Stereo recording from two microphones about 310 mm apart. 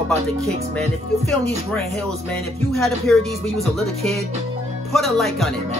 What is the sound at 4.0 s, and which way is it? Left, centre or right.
Speech, centre.